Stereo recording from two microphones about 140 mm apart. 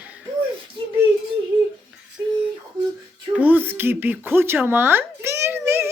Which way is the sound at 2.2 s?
20° right (ahead or behind).